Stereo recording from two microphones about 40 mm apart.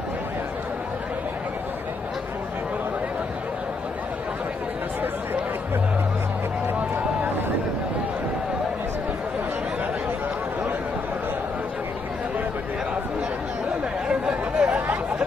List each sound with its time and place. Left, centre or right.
14.0 s chatter: right